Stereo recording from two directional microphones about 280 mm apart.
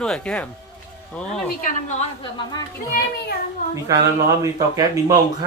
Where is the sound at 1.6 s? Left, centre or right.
Left.